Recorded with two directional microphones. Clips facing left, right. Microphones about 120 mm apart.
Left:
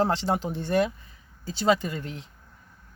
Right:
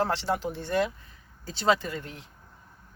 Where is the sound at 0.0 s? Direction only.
15° left (ahead or behind).